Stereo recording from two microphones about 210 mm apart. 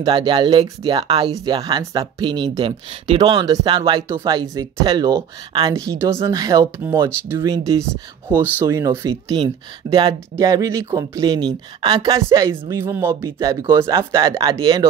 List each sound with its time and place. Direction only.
0.0 s speech: 25° right (ahead or behind)